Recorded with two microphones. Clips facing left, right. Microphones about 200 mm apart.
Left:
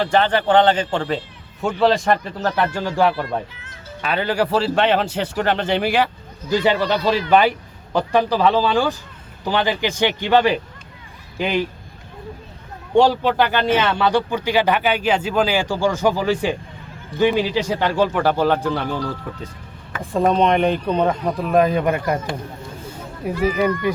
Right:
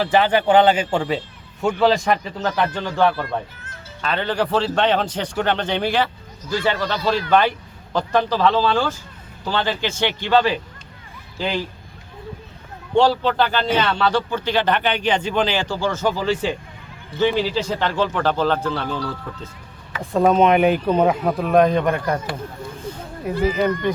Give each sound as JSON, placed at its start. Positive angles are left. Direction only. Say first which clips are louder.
{"t": 0.0, "sound": "speech", "louder": "even", "side_deg": -5}
{"t": 12.9, "sound": "speech", "louder": "left 2 dB", "side_deg": 15}
{"t": 20.0, "sound": "speech", "louder": "right 2 dB", "side_deg": 0}